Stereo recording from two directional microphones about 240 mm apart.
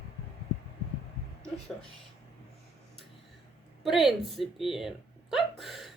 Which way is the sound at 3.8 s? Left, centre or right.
Centre.